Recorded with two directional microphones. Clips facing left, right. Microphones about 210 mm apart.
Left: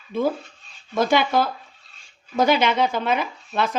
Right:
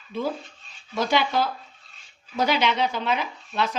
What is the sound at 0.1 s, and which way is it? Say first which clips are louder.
Speech: left 5 dB; 50° left (ahead or behind).